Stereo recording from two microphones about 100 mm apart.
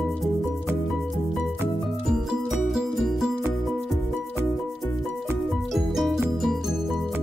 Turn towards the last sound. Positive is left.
turn(degrees=0)  # may be behind; listen again after turning